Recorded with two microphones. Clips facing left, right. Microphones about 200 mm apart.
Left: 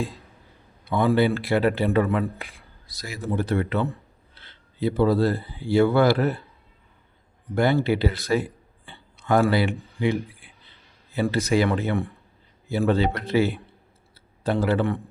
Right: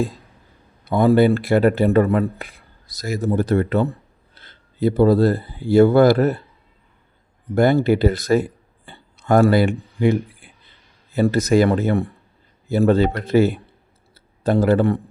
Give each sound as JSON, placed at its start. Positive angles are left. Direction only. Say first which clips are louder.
{"t": 0.9, "sound": "speech", "louder": "right 6 dB", "side_deg": -45}
{"t": 7.5, "sound": "speech", "louder": "right 5 dB", "side_deg": -45}
{"t": 14.1, "sound": "a sound", "louder": "right 6 dB", "side_deg": -45}